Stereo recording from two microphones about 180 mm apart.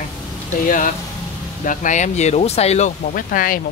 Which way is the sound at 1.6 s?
45° left (ahead or behind).